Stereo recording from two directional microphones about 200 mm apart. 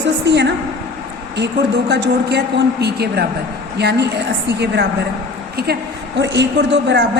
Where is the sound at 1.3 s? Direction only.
60° right (ahead or behind).